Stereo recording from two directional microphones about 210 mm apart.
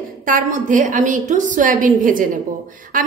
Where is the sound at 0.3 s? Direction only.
40° right (ahead or behind).